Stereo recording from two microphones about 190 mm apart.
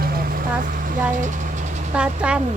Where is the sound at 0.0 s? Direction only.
50° right (ahead or behind).